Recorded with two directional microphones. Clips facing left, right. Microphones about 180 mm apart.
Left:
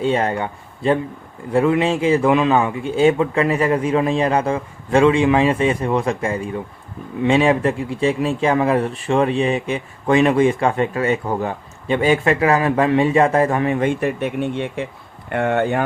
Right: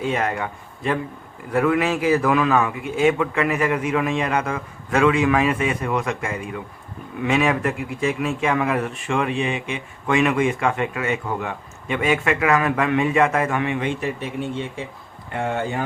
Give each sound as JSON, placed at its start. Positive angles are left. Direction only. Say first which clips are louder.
{"t": 0.0, "sound": "a man's voice", "louder": "left 4 dB", "side_deg": 30}